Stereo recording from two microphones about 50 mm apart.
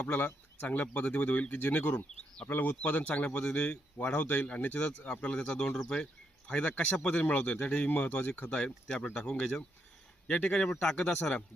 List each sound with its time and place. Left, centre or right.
0.1 s speech: left
4.8 s speech: centre
8.4 s speech: centre